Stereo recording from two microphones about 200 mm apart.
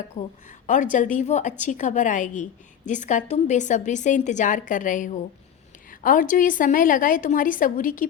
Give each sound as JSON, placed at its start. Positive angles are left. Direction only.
{"t": 0.2, "sound": "a woman's voice", "side_deg": 40}